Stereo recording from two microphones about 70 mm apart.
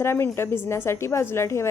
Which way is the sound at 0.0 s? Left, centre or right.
Left.